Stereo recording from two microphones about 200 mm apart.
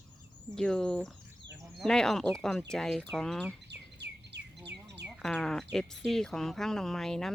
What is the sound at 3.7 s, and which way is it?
Bird, 60° right (ahead or behind).